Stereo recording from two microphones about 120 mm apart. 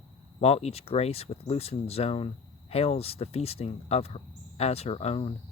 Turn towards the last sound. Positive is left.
turn(degrees=55)  # may be behind; listen again after turning